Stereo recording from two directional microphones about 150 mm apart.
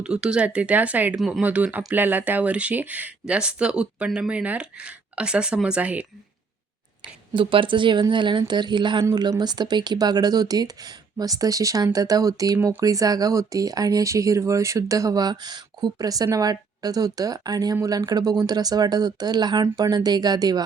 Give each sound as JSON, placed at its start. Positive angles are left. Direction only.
{"t": 0.0, "sound": "speech", "side_deg": -5}
{"t": 7.3, "sound": "speech", "side_deg": -35}